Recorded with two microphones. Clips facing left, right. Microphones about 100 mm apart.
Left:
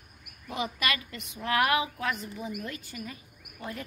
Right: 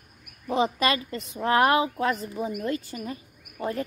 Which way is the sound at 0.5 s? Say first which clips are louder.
Right 8 dB; 30° right (ahead or behind).